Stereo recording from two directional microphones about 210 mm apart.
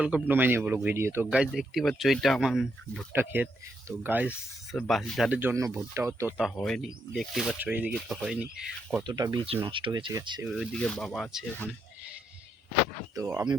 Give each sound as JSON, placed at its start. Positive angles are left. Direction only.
{"t": 0.0, "sound": "speech", "side_deg": -10}
{"t": 6.3, "sound": "speech", "side_deg": 0}
{"t": 9.0, "sound": "speech", "side_deg": -20}
{"t": 10.4, "sound": "speech", "side_deg": 0}
{"t": 13.1, "sound": "speech", "side_deg": -10}